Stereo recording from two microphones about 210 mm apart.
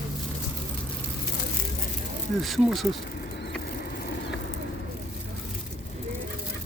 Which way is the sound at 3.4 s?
50° left (ahead or behind).